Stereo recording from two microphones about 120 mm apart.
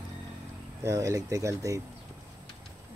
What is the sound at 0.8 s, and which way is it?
Speech, 25° right (ahead or behind).